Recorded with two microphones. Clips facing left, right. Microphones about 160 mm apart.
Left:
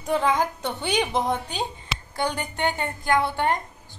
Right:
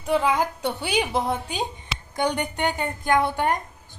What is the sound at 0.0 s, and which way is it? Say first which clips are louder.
A woman's voice: right 1 dB; 5° right (ahead or behind).